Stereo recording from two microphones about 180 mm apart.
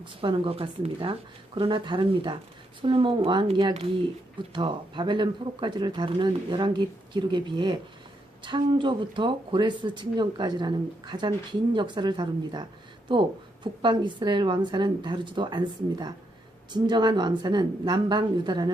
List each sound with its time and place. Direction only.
0.0 s speech: 30° right (ahead or behind)